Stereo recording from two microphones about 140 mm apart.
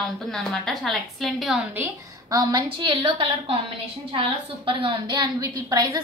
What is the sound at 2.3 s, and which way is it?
A woman's voice, 30° right (ahead or behind).